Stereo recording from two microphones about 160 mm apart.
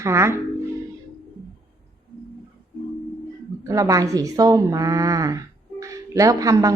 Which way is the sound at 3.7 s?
20° right (ahead or behind).